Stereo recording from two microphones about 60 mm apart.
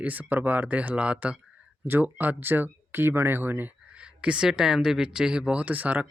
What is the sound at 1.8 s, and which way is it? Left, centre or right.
Speech, right.